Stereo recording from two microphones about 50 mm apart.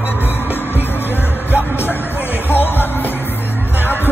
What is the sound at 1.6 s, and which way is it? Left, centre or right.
Music, left.